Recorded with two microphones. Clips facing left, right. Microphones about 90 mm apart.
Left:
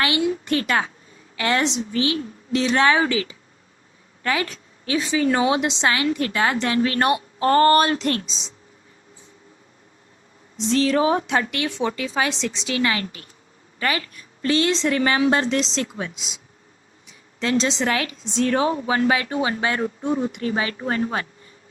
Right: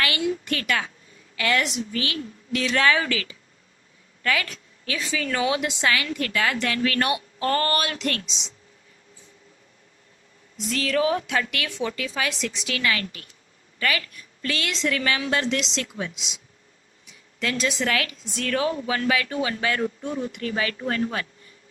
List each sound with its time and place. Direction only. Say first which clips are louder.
0.0 s a woman's voice: left 4 dB; 25° left (ahead or behind)
10.6 s a woman's voice: left 5 dB; 25° left (ahead or behind)
17.4 s a woman's voice: left 4 dB; 25° left (ahead or behind)